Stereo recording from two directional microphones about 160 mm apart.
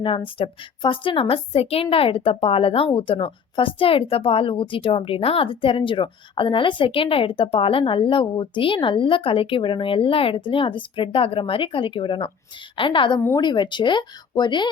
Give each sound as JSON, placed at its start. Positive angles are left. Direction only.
{"t": 0.0, "sound": "a woman's voice", "side_deg": 35}